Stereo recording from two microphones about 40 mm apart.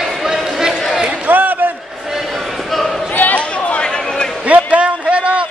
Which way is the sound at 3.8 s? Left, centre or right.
Centre.